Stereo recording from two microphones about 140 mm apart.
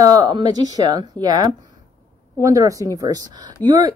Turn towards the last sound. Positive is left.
turn(degrees=-30)  # may be behind; listen again after turning